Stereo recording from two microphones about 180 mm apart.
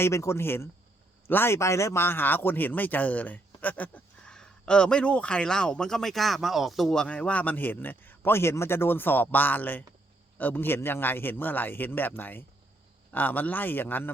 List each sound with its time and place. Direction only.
0.0 s speech: 15° left (ahead or behind)